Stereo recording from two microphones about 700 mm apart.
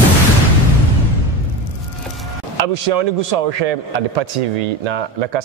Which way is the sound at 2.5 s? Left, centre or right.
Right.